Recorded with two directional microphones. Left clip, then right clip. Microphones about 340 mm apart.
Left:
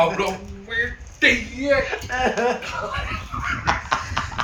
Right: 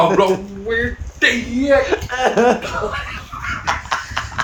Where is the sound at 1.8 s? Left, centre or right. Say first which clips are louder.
Right 5 dB; right.